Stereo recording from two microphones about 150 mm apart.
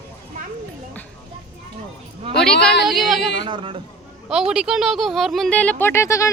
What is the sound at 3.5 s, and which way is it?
Speech, 35° right (ahead or behind).